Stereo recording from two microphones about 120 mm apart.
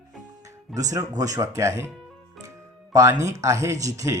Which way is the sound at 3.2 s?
25° right (ahead or behind).